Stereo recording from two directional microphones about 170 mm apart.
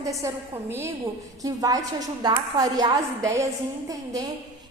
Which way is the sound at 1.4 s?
20° right (ahead or behind).